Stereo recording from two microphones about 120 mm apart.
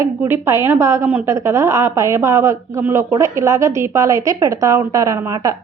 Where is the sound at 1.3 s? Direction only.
25° right (ahead or behind).